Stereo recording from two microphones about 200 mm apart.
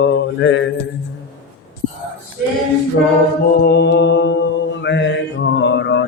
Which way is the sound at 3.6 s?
55° left (ahead or behind).